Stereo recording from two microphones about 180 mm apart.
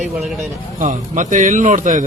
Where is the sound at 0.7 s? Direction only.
45° right (ahead or behind).